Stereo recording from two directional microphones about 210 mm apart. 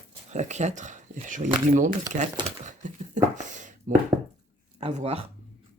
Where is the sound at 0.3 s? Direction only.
35° right (ahead or behind).